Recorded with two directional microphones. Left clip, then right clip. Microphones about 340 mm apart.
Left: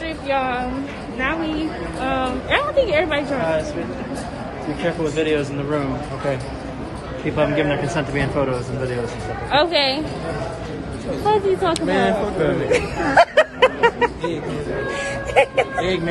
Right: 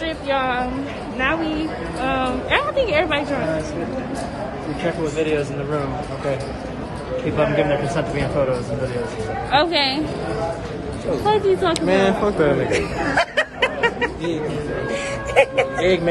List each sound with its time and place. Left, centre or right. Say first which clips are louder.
0.3 s a woman's voice: even; centre
5.2 s a man's voice: even; left
7.3 s a man's voice: even; left
9.5 s a woman's voice: left 1 dB; centre
11.2 s a woman's voice: even; centre
11.7 s a woman's voice: right 1 dB; centre
12.7 s a woman's voice: left 4 dB; centre